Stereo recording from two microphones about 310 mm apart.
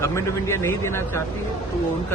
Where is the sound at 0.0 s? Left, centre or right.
Centre.